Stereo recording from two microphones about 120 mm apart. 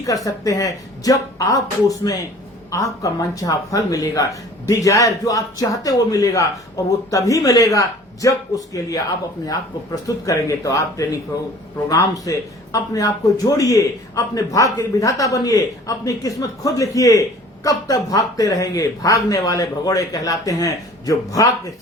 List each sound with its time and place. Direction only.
0.3 s speech: 30° left (ahead or behind)